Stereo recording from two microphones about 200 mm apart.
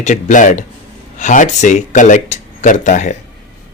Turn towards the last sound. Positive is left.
turn(degrees=40)  # may be behind; listen again after turning